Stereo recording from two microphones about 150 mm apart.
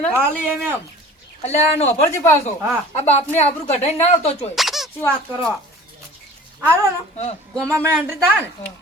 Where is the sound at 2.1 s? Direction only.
20° left (ahead or behind).